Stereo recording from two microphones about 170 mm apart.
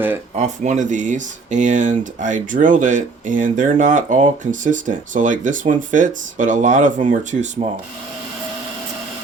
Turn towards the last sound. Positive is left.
turn(degrees=-45)  # may be behind; listen again after turning